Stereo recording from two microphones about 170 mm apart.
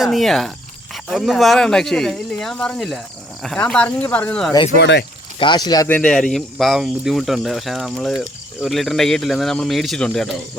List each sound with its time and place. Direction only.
0.0 s speech: centre (ahead or behind)
4.8 s speech: 90° left
5.4 s speech: 25° left (ahead or behind)
5.9 s speech: 5° left (ahead or behind)